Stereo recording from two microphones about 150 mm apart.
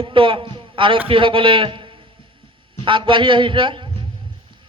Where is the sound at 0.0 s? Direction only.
35° right (ahead or behind).